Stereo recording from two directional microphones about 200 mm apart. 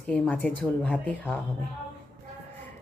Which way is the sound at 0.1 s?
5° left (ahead or behind).